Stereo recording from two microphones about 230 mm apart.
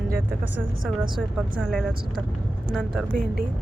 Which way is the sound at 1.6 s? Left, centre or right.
Centre.